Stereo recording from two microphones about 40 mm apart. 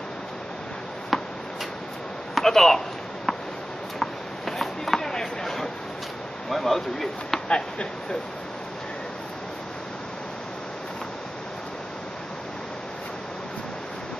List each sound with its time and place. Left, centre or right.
1.1 s tick-tock: centre
2.3 s speech: centre
4.0 s a sound: centre
5.0 s a sound: centre
6.5 s speech: centre
7.4 s speech: left